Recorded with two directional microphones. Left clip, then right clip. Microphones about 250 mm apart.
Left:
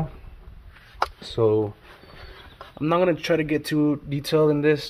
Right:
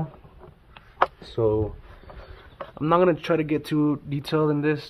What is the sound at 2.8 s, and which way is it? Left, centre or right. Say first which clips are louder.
Speech: right 1 dB; centre.